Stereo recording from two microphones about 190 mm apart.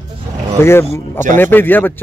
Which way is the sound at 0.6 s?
10° left (ahead or behind).